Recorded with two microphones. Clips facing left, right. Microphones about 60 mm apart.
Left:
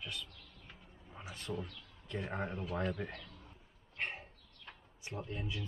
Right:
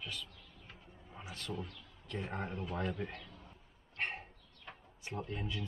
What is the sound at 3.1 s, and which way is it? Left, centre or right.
Speech, right.